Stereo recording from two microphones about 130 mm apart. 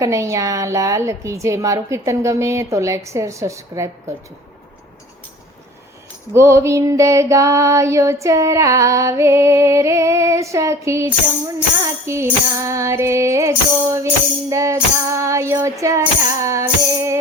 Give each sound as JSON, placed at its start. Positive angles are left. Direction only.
{"t": 0.0, "sound": "female singing", "side_deg": -25}
{"t": 6.3, "sound": "female singing", "side_deg": -20}